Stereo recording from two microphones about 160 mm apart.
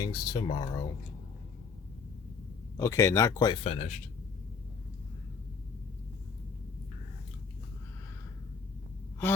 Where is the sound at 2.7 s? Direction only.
20° left (ahead or behind).